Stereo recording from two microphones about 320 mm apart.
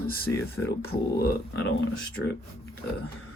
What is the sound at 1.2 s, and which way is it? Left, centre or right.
Speech, left.